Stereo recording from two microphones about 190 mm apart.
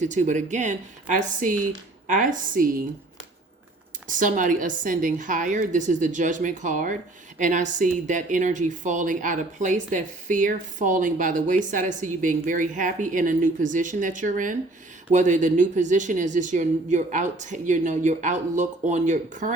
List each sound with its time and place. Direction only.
0.0 s a woman's voice: 40° right (ahead or behind)
4.1 s a woman's voice: 45° right (ahead or behind)